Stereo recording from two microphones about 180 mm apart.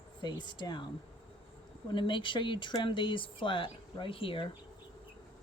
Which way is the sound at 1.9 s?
25° left (ahead or behind).